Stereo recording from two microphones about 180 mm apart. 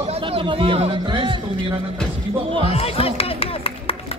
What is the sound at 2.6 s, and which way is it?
Music, 35° left (ahead or behind).